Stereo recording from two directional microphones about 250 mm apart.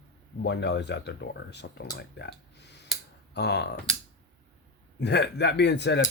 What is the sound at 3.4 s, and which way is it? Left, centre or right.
Speech, left.